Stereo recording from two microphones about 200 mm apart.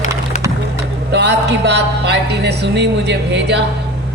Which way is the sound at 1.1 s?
60° right (ahead or behind).